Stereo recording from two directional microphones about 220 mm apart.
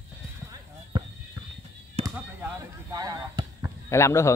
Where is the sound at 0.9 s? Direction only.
20° right (ahead or behind).